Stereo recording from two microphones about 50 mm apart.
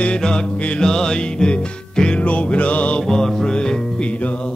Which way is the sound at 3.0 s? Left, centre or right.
Centre.